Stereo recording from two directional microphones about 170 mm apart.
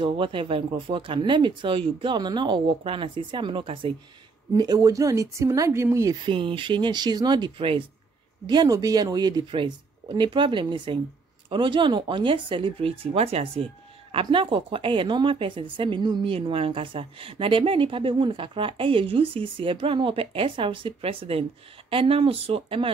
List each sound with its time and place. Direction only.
0.0 s a woman's voice: 30° right (ahead or behind)
6.2 s a woman's voice: 30° right (ahead or behind)